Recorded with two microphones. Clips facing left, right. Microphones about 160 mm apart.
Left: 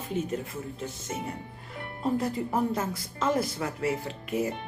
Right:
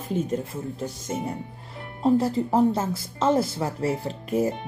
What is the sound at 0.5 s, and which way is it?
Speech, 35° right (ahead or behind).